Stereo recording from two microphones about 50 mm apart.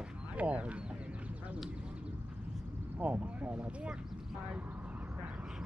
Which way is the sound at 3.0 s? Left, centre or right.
Right.